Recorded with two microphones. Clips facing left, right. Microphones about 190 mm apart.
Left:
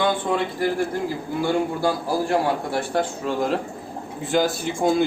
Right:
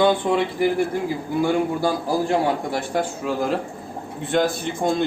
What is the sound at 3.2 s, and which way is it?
A man's voice, centre (ahead or behind).